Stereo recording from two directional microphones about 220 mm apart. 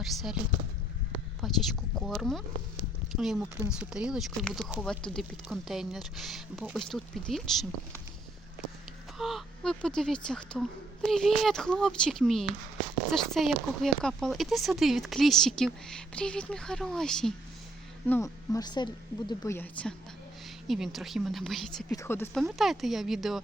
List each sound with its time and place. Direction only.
0.0 s speech: centre (ahead or behind)
1.4 s speech: centre (ahead or behind)
9.1 s speech: centre (ahead or behind)
18.1 s a woman's voice: 15° left (ahead or behind)
22.4 s speech: centre (ahead or behind)